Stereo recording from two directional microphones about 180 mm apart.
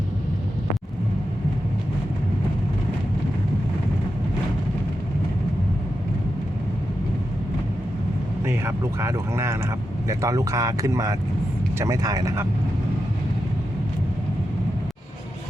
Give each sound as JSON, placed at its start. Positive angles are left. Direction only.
{"t": 8.4, "sound": "speech", "side_deg": -15}